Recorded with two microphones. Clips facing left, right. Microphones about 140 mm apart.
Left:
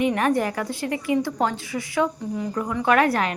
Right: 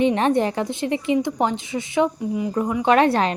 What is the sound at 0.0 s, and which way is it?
A woman's voice, 25° right (ahead or behind).